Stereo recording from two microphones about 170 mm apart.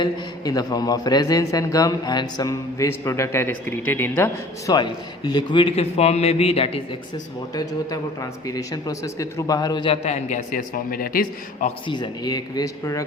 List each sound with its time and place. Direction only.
0.0 s a man's voice: 20° left (ahead or behind)
4.7 s a man's voice: 25° left (ahead or behind)
7.5 s a man's voice: 20° left (ahead or behind); by 11.3 s 60° left (ahead or behind)
11.9 s a man's voice: 25° left (ahead or behind)